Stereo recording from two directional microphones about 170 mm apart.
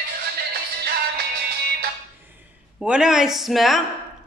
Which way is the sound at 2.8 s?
5° right (ahead or behind).